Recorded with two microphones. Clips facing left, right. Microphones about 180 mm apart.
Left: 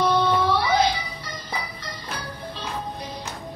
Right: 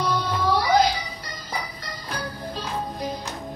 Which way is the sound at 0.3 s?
40° right (ahead or behind).